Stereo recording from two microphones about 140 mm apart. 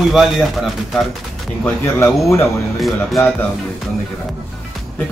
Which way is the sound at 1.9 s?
20° left (ahead or behind).